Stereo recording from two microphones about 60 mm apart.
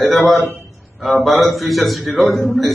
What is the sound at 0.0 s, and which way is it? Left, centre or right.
A man's voice, centre.